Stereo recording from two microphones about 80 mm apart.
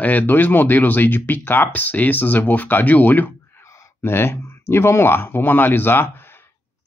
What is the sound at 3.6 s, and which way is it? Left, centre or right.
Speech, left.